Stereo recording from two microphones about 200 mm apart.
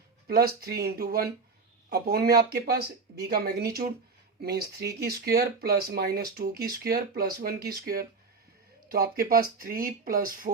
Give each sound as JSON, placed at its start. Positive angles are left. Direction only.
{"t": 0.3, "sound": "speech", "side_deg": -50}